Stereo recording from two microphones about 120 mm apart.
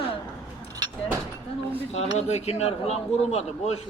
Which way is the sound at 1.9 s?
60° left (ahead or behind).